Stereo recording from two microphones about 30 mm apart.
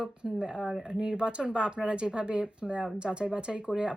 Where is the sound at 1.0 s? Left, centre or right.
Right.